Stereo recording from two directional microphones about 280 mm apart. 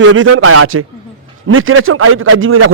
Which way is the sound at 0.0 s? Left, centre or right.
Right.